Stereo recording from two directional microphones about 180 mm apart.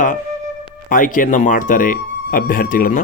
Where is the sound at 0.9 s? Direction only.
50° left (ahead or behind).